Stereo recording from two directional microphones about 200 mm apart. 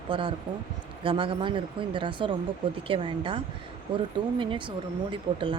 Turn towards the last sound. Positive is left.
turn(degrees=-25)  # may be behind; listen again after turning